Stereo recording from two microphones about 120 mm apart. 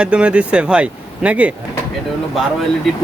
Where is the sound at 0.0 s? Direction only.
10° right (ahead or behind).